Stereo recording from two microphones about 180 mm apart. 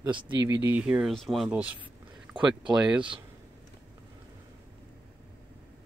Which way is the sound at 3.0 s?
25° right (ahead or behind).